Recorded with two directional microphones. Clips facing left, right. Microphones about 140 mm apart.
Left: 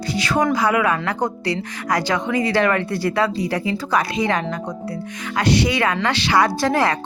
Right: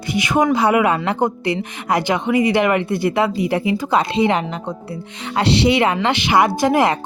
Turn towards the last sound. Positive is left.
turn(degrees=-20)  # may be behind; listen again after turning